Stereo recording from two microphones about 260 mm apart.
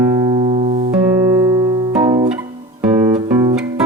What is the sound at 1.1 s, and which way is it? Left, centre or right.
Music, centre.